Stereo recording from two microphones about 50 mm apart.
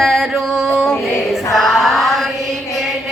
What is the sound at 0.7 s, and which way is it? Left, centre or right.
Female singing, centre.